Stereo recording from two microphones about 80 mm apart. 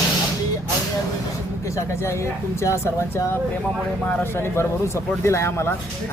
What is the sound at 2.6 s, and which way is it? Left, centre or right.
Speech, left.